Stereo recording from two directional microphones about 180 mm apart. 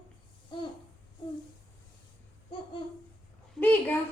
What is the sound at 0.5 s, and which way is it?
Speech, 25° left (ahead or behind).